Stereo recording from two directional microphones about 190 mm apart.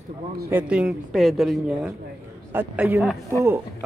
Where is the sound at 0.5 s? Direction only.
5° right (ahead or behind).